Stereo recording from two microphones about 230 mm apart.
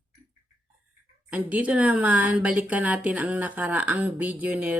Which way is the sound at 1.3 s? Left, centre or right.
Centre.